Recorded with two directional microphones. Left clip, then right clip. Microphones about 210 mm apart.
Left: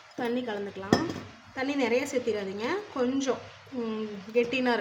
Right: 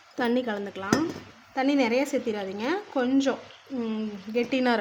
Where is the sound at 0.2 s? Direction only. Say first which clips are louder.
Right 4 dB; 50° right (ahead or behind).